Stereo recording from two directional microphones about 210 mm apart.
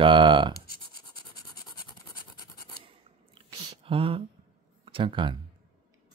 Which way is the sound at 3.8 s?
25° right (ahead or behind).